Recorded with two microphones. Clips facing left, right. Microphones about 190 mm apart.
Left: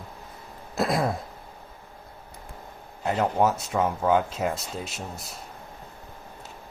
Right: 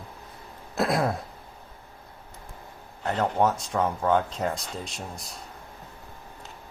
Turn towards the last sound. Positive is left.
turn(degrees=5)  # may be behind; listen again after turning